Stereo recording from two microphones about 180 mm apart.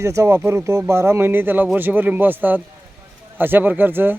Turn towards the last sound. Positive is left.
turn(degrees=-10)  # may be behind; listen again after turning